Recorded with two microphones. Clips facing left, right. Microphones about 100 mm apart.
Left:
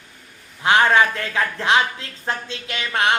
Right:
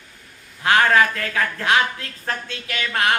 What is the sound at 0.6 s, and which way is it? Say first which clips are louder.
Speech: left 1 dB; 20° left (ahead or behind).